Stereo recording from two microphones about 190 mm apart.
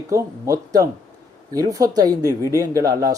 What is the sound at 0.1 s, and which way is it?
Speech, 15° right (ahead or behind).